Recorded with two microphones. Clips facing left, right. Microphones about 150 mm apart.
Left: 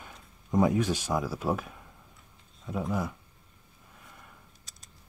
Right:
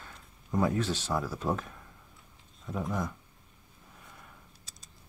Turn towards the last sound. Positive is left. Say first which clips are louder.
# left 2 dB
turn(degrees=5)  # may be behind; listen again after turning